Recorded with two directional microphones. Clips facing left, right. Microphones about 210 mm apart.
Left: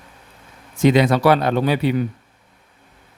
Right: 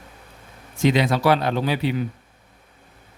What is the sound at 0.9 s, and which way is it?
Speech, 55° left (ahead or behind).